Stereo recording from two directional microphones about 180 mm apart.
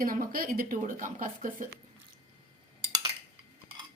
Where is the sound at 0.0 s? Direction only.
50° right (ahead or behind).